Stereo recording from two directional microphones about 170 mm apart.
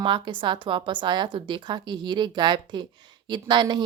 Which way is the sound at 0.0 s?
30° right (ahead or behind).